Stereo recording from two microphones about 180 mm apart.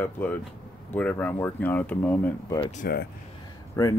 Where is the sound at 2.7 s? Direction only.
55° left (ahead or behind).